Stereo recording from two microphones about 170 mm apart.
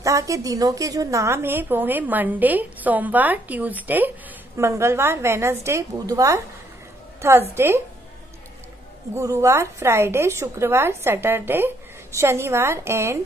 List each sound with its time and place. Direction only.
0.0 s a woman's voice: 20° right (ahead or behind)
9.1 s a woman's voice: 15° right (ahead or behind)